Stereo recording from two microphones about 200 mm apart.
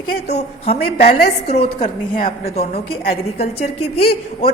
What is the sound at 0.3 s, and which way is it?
A woman's voice, 30° left (ahead or behind).